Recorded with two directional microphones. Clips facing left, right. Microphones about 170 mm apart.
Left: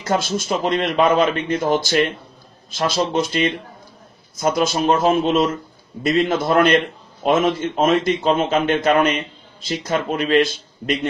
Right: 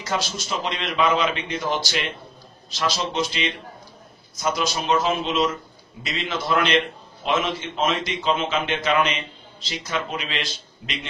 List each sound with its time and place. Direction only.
0.0 s a man's voice: 50° left (ahead or behind)